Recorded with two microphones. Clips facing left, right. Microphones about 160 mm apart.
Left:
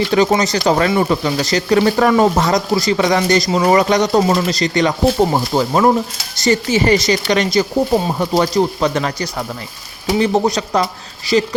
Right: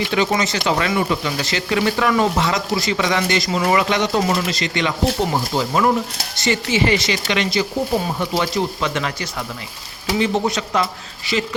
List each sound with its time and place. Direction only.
0.1 s speech: 40° left (ahead or behind)
10.2 s speech: 40° left (ahead or behind)